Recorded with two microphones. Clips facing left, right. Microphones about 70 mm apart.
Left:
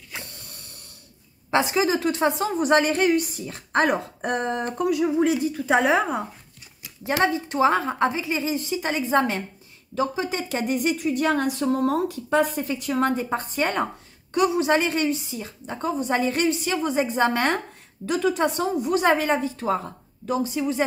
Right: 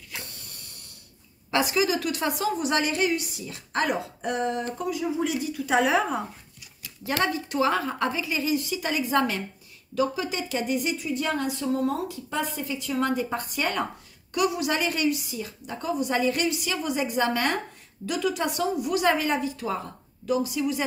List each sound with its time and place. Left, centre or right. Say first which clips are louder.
1.5 s a woman's voice: left 3 dB; left
5.2 s a woman's voice: left 6 dB; left
13.1 s a woman's voice: left 2 dB; left